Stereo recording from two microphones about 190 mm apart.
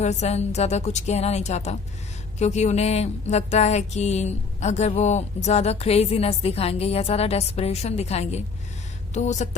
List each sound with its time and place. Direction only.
0.0 s music: 35° left (ahead or behind)